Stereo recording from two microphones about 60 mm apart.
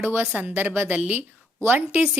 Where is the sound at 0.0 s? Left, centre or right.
Right.